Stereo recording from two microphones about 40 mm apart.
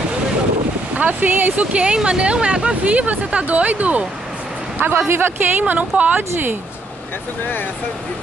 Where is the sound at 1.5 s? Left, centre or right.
Right.